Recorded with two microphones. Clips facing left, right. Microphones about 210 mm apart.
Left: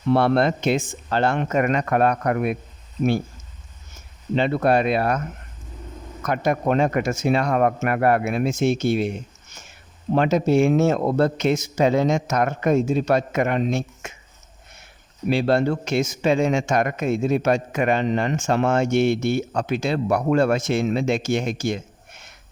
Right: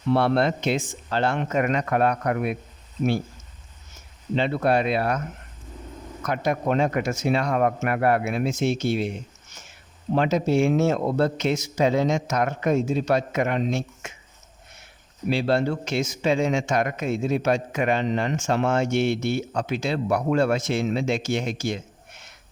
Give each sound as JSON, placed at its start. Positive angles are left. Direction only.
{"t": 0.1, "sound": "speech", "side_deg": 50}
{"t": 4.4, "sound": "speech", "side_deg": 50}
{"t": 6.2, "sound": "speech", "side_deg": 50}
{"t": 15.3, "sound": "speech", "side_deg": 50}